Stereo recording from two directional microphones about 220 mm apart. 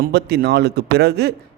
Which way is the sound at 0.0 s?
45° right (ahead or behind).